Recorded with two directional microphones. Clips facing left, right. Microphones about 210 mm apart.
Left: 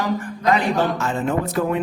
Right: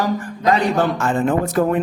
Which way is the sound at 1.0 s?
50° right (ahead or behind).